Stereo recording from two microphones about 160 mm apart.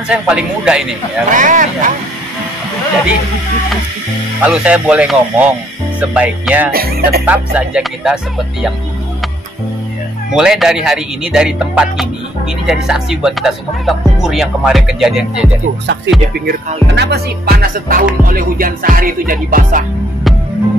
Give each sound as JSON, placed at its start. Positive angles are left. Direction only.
{"t": 0.1, "sound": "speech", "side_deg": -5}
{"t": 1.3, "sound": "speech", "side_deg": -55}
{"t": 4.4, "sound": "speech", "side_deg": -5}
{"t": 6.7, "sound": "music", "side_deg": -70}
{"t": 7.2, "sound": "speech", "side_deg": -5}
{"t": 10.3, "sound": "speech", "side_deg": -5}
{"t": 16.3, "sound": "music", "side_deg": -85}